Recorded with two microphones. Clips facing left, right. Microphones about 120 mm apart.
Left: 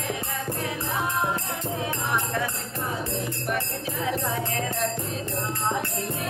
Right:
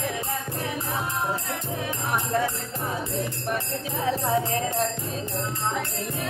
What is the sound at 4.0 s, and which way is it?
Jingle bell, 30° right (ahead or behind).